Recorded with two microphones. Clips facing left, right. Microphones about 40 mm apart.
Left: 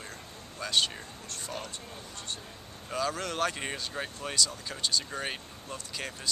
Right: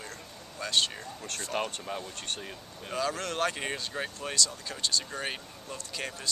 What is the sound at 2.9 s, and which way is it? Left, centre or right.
Speech, centre.